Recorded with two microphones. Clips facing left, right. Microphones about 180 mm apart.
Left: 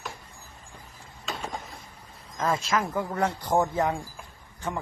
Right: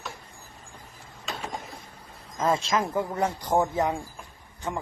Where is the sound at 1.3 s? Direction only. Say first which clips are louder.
Left 1 dB; centre (ahead or behind).